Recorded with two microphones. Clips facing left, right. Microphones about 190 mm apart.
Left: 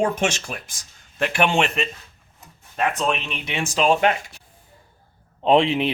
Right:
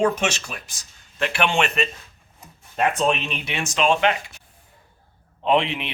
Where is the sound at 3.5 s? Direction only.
30° left (ahead or behind).